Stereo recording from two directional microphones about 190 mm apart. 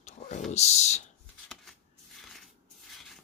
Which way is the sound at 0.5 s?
35° left (ahead or behind).